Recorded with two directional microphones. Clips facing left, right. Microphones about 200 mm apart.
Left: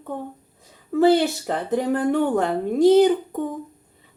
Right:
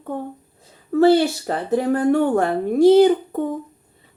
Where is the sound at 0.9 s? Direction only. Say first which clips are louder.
Right 2 dB; 20° left (ahead or behind).